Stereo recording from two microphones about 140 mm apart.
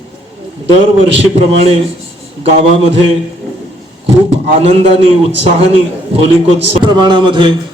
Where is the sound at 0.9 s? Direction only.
45° right (ahead or behind).